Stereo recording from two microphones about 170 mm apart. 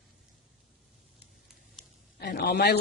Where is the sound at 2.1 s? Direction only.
70° left (ahead or behind).